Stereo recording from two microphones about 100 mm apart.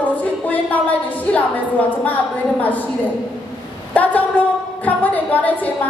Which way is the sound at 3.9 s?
15° left (ahead or behind).